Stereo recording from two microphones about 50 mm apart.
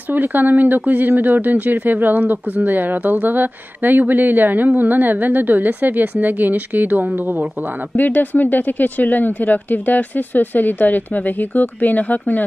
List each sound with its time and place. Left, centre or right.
0.1 s speech: right
7.9 s speech: left